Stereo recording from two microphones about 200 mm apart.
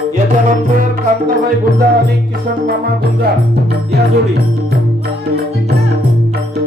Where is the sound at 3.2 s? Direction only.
55° right (ahead or behind).